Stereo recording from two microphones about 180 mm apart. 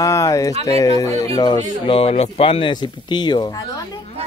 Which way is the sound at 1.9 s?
30° left (ahead or behind).